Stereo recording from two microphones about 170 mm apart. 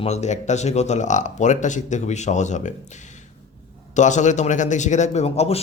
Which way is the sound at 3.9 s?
45° left (ahead or behind).